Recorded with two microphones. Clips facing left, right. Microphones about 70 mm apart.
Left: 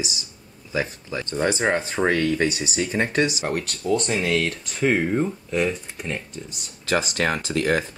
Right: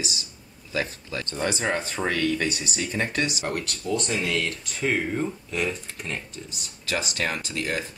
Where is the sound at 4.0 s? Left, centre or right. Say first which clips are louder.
Left 3 dB; left.